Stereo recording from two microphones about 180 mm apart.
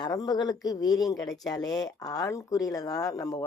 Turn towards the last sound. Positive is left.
turn(degrees=20)  # may be behind; listen again after turning